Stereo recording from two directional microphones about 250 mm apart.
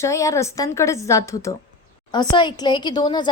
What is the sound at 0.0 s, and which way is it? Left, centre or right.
A woman's voice, centre.